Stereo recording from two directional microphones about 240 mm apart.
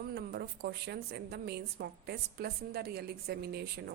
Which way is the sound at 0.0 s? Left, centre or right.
Right.